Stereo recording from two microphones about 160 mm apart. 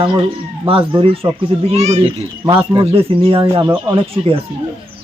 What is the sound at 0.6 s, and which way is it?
Speech, 35° right (ahead or behind).